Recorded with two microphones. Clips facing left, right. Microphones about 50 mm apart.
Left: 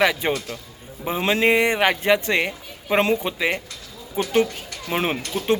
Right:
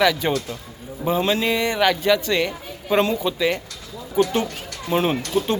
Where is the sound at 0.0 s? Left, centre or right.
Left.